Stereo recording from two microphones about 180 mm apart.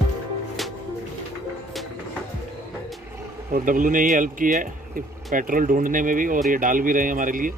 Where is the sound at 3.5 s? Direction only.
50° right (ahead or behind).